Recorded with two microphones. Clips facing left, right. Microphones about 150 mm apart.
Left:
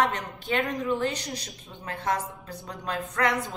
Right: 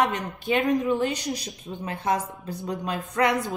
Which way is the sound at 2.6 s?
15° right (ahead or behind).